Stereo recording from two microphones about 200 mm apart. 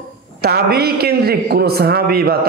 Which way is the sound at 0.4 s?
50° right (ahead or behind).